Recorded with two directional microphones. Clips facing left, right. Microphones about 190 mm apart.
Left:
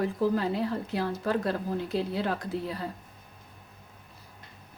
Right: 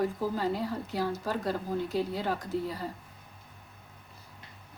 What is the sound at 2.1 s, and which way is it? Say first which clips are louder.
Speech: left 1 dB; 65° left (ahead or behind).